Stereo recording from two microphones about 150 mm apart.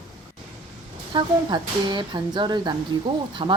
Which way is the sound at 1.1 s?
30° right (ahead or behind).